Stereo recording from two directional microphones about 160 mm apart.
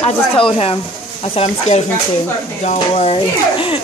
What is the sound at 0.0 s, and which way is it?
A child's voice, 35° left (ahead or behind).